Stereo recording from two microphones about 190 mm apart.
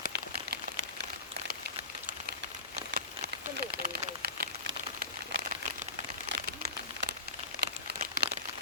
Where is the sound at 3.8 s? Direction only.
50° right (ahead or behind).